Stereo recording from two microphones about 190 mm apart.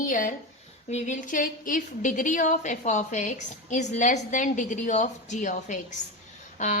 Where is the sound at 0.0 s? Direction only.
45° left (ahead or behind).